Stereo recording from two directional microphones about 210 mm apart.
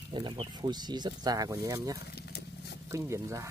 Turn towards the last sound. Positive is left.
turn(degrees=-15)  # may be behind; listen again after turning